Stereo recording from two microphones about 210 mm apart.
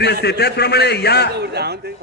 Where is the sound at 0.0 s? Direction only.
50° left (ahead or behind).